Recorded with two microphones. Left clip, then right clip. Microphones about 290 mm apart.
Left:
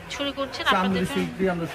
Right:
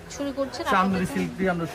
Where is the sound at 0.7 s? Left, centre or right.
Centre.